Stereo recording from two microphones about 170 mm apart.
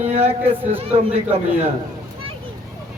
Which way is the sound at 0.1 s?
35° right (ahead or behind).